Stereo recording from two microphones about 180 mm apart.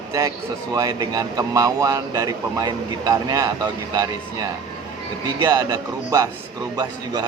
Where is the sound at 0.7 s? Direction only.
20° right (ahead or behind).